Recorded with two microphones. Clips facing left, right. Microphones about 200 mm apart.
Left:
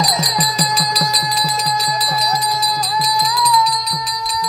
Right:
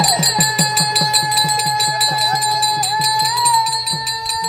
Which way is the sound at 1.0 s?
25° right (ahead or behind).